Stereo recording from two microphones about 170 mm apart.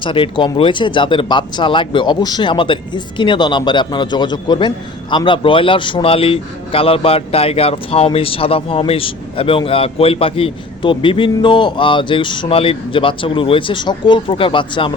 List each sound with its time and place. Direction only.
0.0 s a man's voice: 30° left (ahead or behind)